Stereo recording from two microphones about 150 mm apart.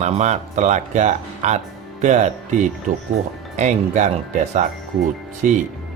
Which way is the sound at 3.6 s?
55° right (ahead or behind).